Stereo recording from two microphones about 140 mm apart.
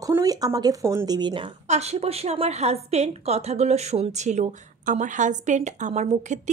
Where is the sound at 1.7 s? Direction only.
50° right (ahead or behind).